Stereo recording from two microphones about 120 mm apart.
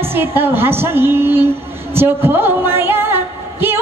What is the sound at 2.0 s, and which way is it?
Music, 20° right (ahead or behind).